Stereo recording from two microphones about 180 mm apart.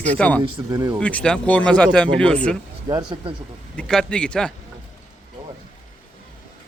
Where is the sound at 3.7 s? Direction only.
5° left (ahead or behind).